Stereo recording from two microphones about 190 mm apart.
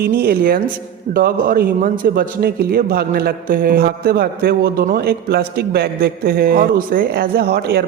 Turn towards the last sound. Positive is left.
turn(degrees=-55)  # may be behind; listen again after turning